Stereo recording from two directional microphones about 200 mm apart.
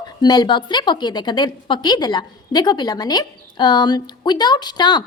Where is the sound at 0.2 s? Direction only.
20° left (ahead or behind).